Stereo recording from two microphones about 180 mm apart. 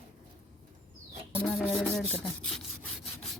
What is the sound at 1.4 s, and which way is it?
Rub, centre (ahead or behind).